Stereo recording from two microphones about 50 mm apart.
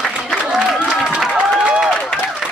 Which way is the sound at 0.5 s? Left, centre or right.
Centre.